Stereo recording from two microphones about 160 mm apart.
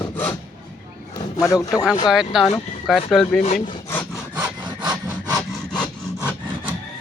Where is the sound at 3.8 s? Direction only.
15° left (ahead or behind).